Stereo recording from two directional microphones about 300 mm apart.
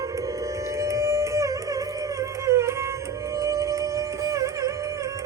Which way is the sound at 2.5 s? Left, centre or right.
Centre.